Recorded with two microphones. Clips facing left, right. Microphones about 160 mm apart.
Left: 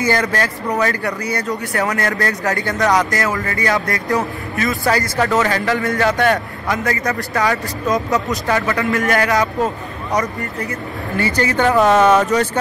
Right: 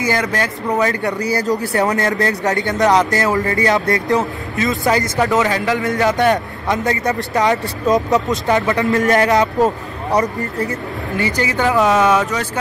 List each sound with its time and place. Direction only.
0.0 s speech: 20° right (ahead or behind)
11.1 s speech: 20° right (ahead or behind)
11.6 s speech: centre (ahead or behind)